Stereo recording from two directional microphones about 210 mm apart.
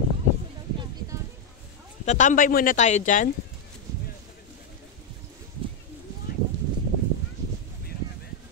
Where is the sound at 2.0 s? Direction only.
35° left (ahead or behind).